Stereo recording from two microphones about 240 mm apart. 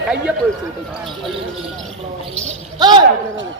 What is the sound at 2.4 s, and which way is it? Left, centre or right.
Speech, centre.